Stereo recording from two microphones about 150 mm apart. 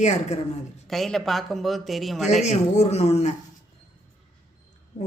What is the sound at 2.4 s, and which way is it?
Speech, 50° left (ahead or behind).